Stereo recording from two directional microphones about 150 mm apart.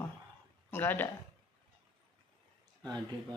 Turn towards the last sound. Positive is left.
turn(degrees=-25)  # may be behind; listen again after turning